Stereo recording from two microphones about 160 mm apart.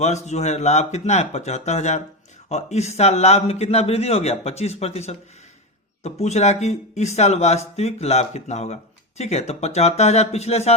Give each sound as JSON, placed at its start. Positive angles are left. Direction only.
{"t": 0.3, "sound": "a man's voice", "side_deg": 45}